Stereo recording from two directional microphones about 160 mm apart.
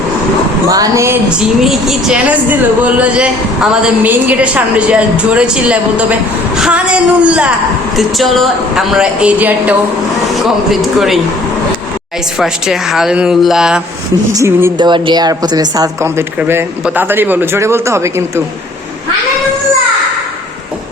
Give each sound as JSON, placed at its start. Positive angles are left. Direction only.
{"t": 0.7, "sound": "speech", "side_deg": -20}
{"t": 1.4, "sound": "speech", "side_deg": 0}
{"t": 12.4, "sound": "speech", "side_deg": 0}
{"t": 14.3, "sound": "speech", "side_deg": -15}
{"t": 14.8, "sound": "speech", "side_deg": -30}